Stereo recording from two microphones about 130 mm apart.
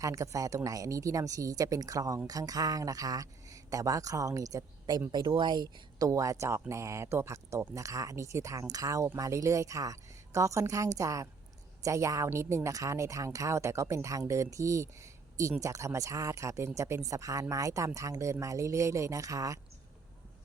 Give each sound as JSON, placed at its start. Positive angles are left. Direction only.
{"t": 0.0, "sound": "a woman's voice", "side_deg": -25}